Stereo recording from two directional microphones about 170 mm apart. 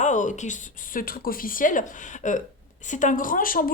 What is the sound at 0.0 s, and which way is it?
A woman's voice, 45° left (ahead or behind).